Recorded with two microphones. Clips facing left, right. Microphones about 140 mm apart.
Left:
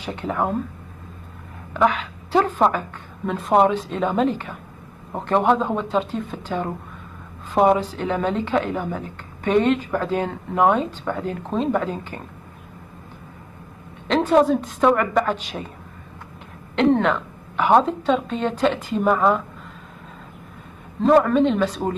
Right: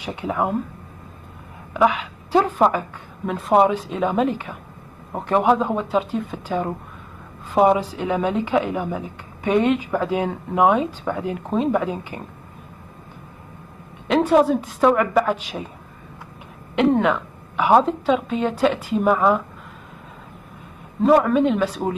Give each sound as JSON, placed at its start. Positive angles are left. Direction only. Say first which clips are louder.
{"t": 0.0, "sound": "a woman's voice", "louder": "right 1 dB", "side_deg": -10}
{"t": 1.7, "sound": "a woman's voice", "louder": "right 1 dB", "side_deg": -10}
{"t": 14.0, "sound": "a woman's voice", "louder": "right 1 dB", "side_deg": -5}
{"t": 16.7, "sound": "a woman's voice", "louder": "even", "side_deg": -5}
{"t": 21.0, "sound": "a woman's voice", "louder": "even", "side_deg": -5}